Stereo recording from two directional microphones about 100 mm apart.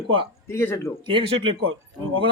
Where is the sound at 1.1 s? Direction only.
60° right (ahead or behind).